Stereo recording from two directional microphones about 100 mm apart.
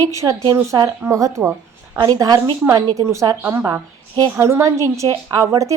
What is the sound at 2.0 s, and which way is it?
A woman's voice, 40° right (ahead or behind).